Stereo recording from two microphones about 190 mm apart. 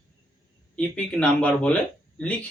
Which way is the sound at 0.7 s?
5° left (ahead or behind).